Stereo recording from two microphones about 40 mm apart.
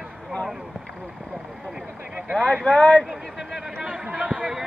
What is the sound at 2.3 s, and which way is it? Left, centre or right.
Speech, left.